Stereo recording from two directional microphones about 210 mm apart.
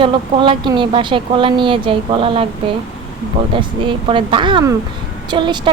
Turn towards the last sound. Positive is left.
turn(degrees=-20)  # may be behind; listen again after turning